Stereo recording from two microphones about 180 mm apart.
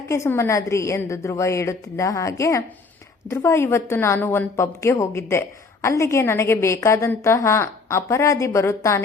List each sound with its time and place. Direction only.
0.1 s a woman's voice: 15° left (ahead or behind)